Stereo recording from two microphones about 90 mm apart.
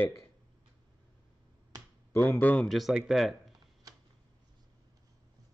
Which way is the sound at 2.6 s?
Centre (ahead or behind).